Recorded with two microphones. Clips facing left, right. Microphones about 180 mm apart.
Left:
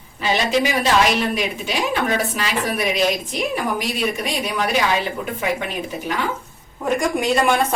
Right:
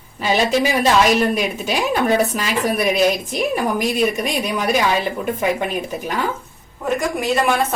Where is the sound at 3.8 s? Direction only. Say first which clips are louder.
Right 5 dB; 45° right (ahead or behind).